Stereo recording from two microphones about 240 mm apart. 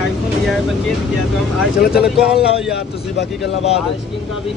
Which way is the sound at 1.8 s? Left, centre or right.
Left.